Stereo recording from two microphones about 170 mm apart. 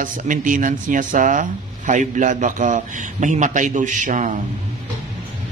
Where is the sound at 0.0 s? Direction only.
50° right (ahead or behind).